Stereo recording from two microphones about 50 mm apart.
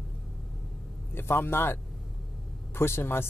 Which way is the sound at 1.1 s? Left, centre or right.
Left.